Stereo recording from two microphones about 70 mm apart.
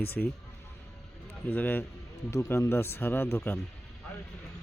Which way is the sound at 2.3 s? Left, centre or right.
Left.